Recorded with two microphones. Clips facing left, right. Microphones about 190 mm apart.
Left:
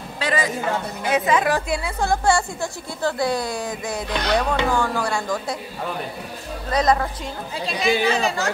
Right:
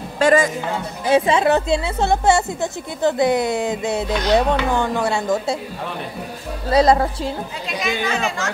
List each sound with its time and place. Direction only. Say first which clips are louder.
0.2 s a man's voice: right 9 dB; 45° right (ahead or behind)
1.0 s a woman's voice: right 5 dB; 30° right (ahead or behind)
6.7 s speech: right 5 dB; 30° right (ahead or behind)
7.6 s speech: left 4 dB; 30° left (ahead or behind)